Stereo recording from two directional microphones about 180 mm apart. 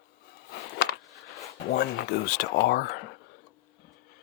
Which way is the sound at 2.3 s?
65° left (ahead or behind).